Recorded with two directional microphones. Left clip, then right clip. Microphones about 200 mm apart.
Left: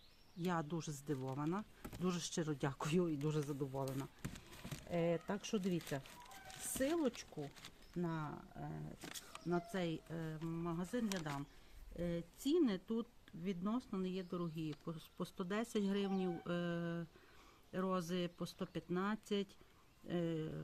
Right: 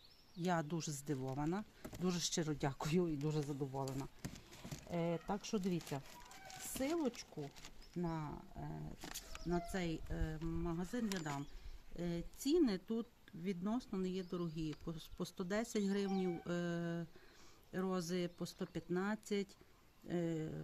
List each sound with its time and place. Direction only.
0.4 s speech: 25° right (ahead or behind)
3.4 s speech: 5° right (ahead or behind)
9.0 s speech: 5° right (ahead or behind)
9.5 s speech: 15° right (ahead or behind)
10.4 s speech: 5° right (ahead or behind)